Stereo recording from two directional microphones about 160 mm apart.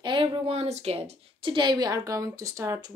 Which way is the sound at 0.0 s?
30° right (ahead or behind).